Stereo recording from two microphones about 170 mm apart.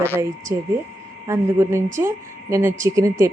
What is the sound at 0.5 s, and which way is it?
A man's voice, 15° right (ahead or behind).